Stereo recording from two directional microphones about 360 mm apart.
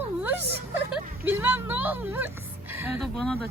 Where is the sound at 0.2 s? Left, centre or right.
Centre.